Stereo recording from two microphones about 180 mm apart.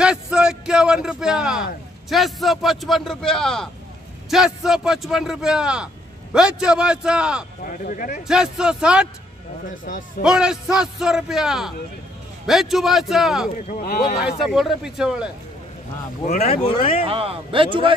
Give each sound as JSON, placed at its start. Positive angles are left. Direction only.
{"t": 0.0, "sound": "speech", "side_deg": -5}
{"t": 7.6, "sound": "speech", "side_deg": 50}
{"t": 8.2, "sound": "speech", "side_deg": -5}
{"t": 9.8, "sound": "speech", "side_deg": 50}
{"t": 10.2, "sound": "speech", "side_deg": -5}
{"t": 13.5, "sound": "speech", "side_deg": 50}
{"t": 14.1, "sound": "speech", "side_deg": 0}
{"t": 16.3, "sound": "speech", "side_deg": 35}
{"t": 17.1, "sound": "a man's voice", "side_deg": -30}